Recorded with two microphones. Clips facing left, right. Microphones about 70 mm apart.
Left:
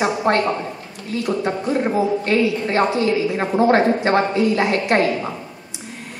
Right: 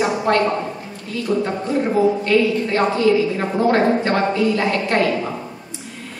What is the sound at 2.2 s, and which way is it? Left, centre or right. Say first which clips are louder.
Speech: right 2 dB; left.